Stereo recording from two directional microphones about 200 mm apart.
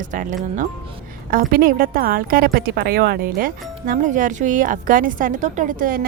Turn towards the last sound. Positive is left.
turn(degrees=-45)  # may be behind; listen again after turning